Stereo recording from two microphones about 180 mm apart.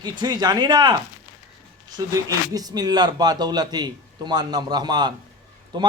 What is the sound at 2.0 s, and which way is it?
A man's voice, 20° right (ahead or behind).